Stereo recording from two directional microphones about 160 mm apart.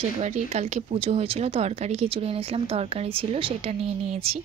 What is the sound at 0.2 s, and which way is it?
Speech, 40° right (ahead or behind).